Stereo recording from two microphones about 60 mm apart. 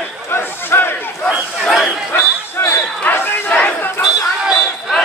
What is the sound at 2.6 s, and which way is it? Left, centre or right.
Basketball bounce, left.